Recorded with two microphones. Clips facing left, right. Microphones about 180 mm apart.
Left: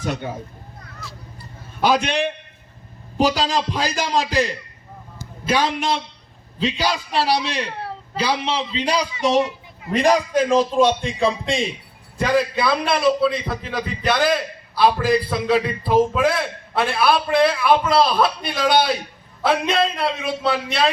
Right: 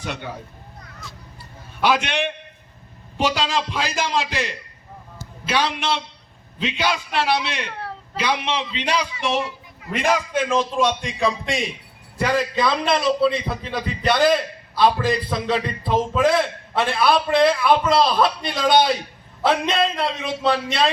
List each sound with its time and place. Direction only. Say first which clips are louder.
0.0 s speech: left 5 dB; 45° left (ahead or behind)
1.0 s a man's voice: left 3 dB; centre (ahead or behind)
1.8 s a man's voice: left 2 dB; 40° left (ahead or behind)
3.2 s a man's voice: left 3 dB; 35° left (ahead or behind)
5.6 s a man's voice: left 2 dB; 40° left (ahead or behind)
12.2 s a man's voice: left 1 dB; 15° left (ahead or behind)
19.7 s a man's voice: left 1 dB; 5° left (ahead or behind)